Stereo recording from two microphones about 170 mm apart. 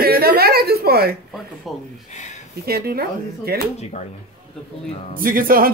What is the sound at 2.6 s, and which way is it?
Speech, 65° right (ahead or behind).